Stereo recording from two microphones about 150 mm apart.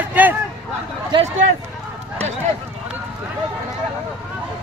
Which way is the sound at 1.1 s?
30° right (ahead or behind).